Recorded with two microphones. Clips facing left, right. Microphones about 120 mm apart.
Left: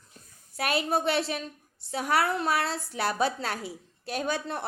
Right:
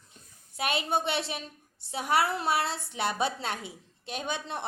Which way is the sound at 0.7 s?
Centre (ahead or behind).